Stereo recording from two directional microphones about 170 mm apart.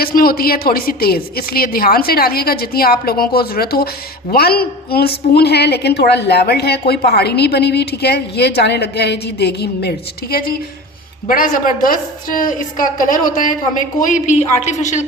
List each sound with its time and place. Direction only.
0.0 s a woman's voice: 60° left (ahead or behind); by 15.0 s 45° left (ahead or behind)